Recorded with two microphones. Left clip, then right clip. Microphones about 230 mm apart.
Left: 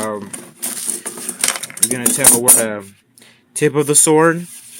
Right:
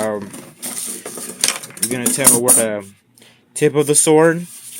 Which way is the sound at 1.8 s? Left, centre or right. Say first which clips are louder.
Left 1 dB; centre.